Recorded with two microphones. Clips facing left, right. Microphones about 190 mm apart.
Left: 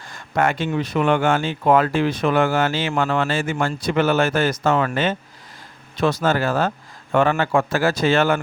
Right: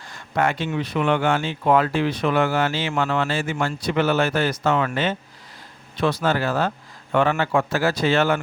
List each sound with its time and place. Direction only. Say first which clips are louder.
0.1 s speech: left 2 dB; 50° left (ahead or behind)